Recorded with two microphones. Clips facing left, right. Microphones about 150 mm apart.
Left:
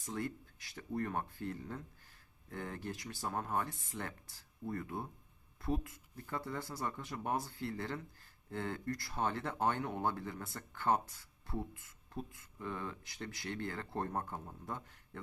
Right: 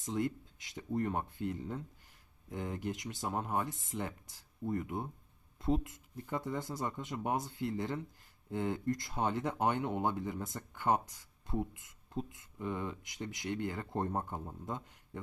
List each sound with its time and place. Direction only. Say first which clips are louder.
0.0 s speech: right 5 dB; 20° right (ahead or behind)